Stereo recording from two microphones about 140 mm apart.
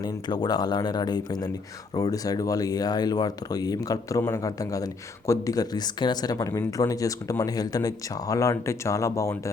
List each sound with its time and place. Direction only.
0.0 s speech: 30° left (ahead or behind)